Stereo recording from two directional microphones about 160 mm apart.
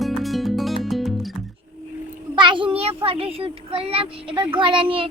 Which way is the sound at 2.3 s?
30° right (ahead or behind).